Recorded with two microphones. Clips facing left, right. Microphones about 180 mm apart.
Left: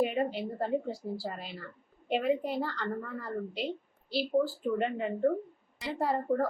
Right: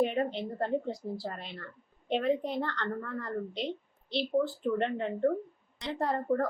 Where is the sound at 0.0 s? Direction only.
5° left (ahead or behind).